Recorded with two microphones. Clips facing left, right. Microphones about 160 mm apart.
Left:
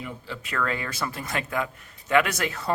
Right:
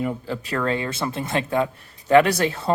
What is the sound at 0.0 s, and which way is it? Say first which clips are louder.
Speech: right 10 dB; 45° right (ahead or behind).